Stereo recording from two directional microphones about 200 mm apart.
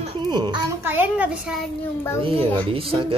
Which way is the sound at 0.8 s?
10° right (ahead or behind).